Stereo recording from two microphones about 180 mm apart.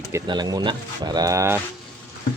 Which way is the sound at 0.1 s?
20° right (ahead or behind).